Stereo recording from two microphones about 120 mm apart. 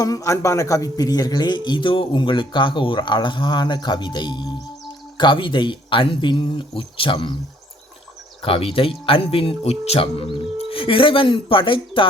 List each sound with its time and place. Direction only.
0.0 s a man's voice: 25° left (ahead or behind); by 7.3 s 45° left (ahead or behind)
8.4 s speech: 50° left (ahead or behind)